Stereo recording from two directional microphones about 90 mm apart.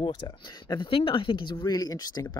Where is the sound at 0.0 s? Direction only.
55° left (ahead or behind).